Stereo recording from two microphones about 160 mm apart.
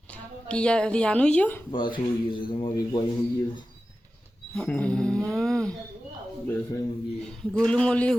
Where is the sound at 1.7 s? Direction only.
30° left (ahead or behind).